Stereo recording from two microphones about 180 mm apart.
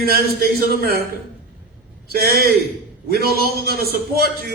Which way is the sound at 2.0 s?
55° right (ahead or behind).